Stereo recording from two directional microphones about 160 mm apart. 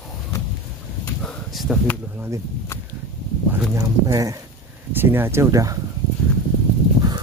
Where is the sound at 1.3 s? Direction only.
Centre (ahead or behind).